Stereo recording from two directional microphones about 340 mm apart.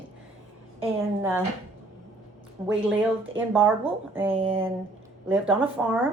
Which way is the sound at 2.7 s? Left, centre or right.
Centre.